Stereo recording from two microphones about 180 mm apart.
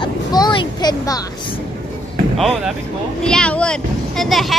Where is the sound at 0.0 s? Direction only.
25° left (ahead or behind).